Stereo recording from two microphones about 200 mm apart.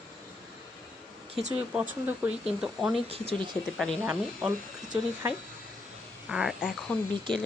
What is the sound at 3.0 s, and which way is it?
Speech, 30° right (ahead or behind).